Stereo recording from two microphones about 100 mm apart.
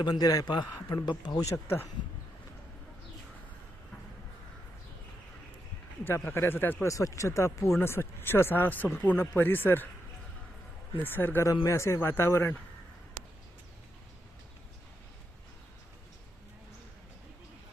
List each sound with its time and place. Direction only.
0.0 s a man's voice: 45° left (ahead or behind)
1.5 s speech: 25° left (ahead or behind)
6.1 s speech: 25° left (ahead or behind)
6.8 s speech: 30° left (ahead or behind)
11.0 s speech: 20° left (ahead or behind)